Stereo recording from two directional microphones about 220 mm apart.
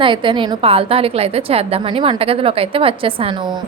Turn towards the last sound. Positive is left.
turn(degrees=-25)  # may be behind; listen again after turning